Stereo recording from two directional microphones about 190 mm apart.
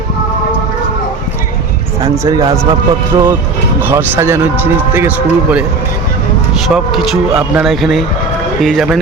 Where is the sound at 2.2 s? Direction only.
20° right (ahead or behind).